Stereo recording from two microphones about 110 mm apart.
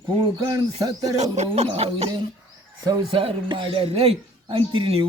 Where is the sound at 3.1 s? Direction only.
55° right (ahead or behind).